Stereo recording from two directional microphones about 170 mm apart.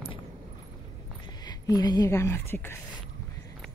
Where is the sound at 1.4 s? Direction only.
25° left (ahead or behind).